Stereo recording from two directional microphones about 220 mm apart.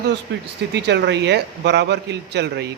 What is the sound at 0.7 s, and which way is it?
A man's voice, 50° right (ahead or behind).